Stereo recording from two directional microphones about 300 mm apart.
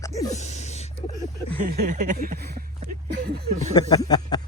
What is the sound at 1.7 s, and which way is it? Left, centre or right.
Speech, right.